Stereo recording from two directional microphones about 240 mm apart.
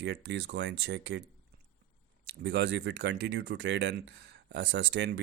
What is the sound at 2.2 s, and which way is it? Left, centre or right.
Speech, right.